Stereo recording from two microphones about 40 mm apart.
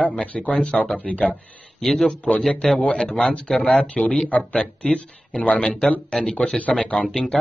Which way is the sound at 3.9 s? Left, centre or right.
Centre.